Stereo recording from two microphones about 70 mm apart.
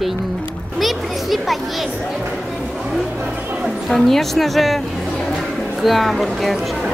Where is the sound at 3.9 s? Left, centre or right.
Centre.